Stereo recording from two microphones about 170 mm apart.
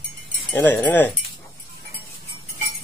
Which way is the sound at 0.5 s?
10° left (ahead or behind).